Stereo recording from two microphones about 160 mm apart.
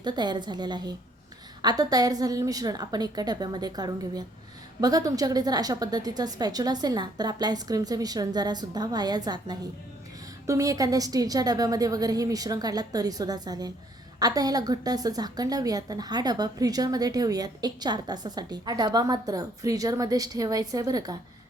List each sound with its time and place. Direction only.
0.0 s a woman's voice: 25° right (ahead or behind)